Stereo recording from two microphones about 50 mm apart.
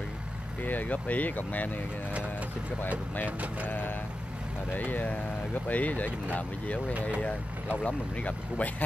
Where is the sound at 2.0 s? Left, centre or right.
Right.